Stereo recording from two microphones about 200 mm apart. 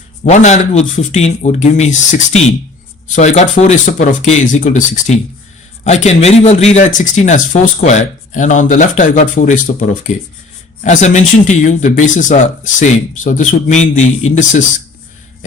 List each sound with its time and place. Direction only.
0.3 s speech: 35° left (ahead or behind)